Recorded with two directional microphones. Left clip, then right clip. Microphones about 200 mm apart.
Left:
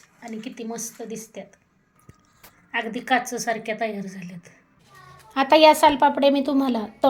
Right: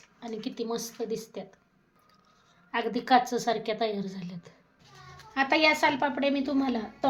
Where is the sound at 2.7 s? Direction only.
10° right (ahead or behind).